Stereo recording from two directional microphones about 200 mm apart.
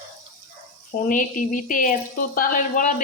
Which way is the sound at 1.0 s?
40° left (ahead or behind).